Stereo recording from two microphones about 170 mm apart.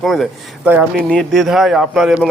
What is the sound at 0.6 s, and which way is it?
Speech, 10° right (ahead or behind).